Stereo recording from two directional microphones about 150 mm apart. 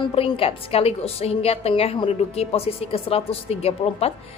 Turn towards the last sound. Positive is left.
turn(degrees=40)  # may be behind; listen again after turning